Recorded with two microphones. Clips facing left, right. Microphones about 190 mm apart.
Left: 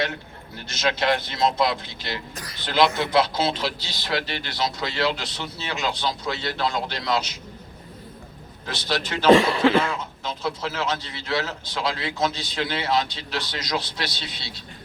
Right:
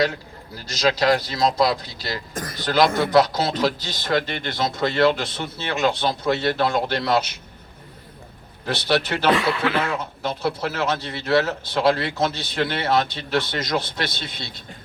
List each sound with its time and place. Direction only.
0.7 s speech: 35° right (ahead or behind); by 7.3 s 60° right (ahead or behind)
8.6 s a man's voice: 60° right (ahead or behind)
9.3 s speech: 30° left (ahead or behind)
10.2 s a man's voice: 60° right (ahead or behind)